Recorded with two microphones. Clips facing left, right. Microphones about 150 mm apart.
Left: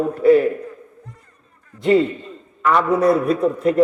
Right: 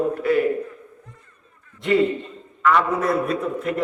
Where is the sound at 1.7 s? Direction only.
40° left (ahead or behind).